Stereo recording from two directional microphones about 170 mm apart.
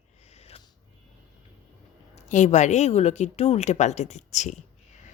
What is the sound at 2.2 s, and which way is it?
A woman's voice, 45° left (ahead or behind).